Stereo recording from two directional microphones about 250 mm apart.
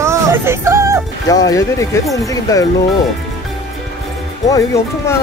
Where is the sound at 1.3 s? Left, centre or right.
Centre.